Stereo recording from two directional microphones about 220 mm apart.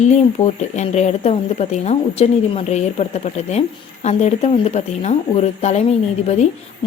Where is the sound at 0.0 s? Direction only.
30° left (ahead or behind).